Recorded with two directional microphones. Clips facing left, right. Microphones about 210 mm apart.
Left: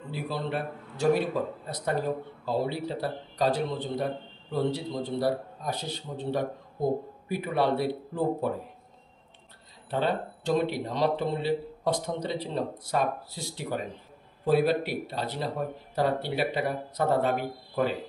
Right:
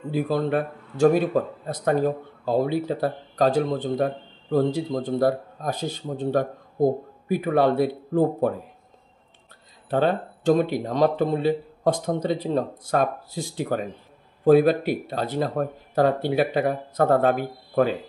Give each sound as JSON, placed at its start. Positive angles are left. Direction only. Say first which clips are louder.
{"t": 0.1, "sound": "a man's voice", "louder": "right 9 dB", "side_deg": -45}
{"t": 9.8, "sound": "a man's voice", "louder": "right 6 dB", "side_deg": -50}